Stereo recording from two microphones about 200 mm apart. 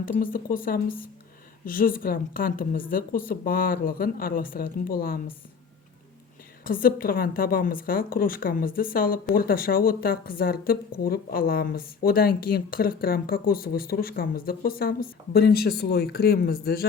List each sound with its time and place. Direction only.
0.0 s a woman's voice: 45° left (ahead or behind)
6.7 s a woman's voice: 45° left (ahead or behind)